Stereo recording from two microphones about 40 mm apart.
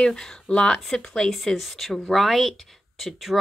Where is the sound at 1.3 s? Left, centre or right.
Centre.